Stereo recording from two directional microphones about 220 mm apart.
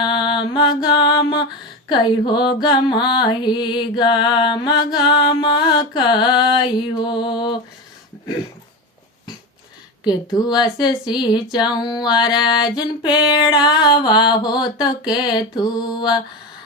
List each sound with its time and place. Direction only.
0.0 s music: 20° left (ahead or behind)
10.0 s music: 20° left (ahead or behind)